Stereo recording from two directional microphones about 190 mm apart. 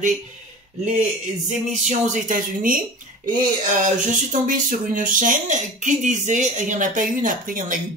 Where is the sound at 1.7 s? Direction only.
40° right (ahead or behind).